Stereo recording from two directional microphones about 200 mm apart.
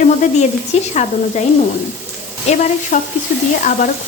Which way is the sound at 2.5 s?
35° left (ahead or behind).